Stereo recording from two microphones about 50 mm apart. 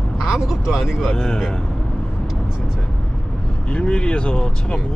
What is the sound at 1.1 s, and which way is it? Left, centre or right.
Speech, centre.